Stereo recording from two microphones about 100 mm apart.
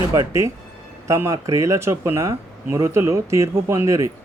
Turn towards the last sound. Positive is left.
turn(degrees=-30)  # may be behind; listen again after turning